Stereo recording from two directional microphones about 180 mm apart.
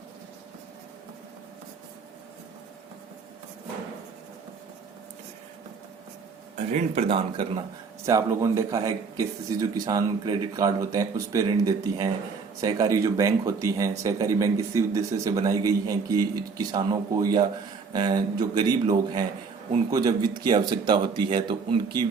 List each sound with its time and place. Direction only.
6.7 s speech: 35° right (ahead or behind)
8.0 s speech: 15° right (ahead or behind)